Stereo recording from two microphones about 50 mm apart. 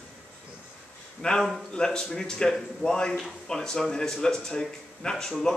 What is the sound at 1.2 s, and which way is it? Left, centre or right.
A man's voice, left.